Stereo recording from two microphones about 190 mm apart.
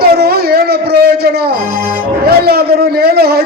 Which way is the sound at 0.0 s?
55° right (ahead or behind).